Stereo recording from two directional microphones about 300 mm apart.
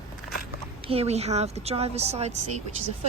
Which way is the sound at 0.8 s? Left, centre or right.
Centre.